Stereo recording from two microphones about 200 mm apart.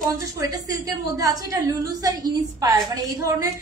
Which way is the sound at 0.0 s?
15° right (ahead or behind).